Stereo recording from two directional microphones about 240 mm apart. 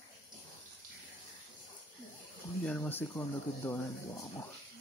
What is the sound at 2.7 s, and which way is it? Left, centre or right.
Speech, centre.